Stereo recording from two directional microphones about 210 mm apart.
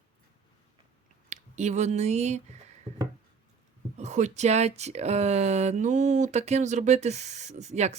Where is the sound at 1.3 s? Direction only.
35° right (ahead or behind).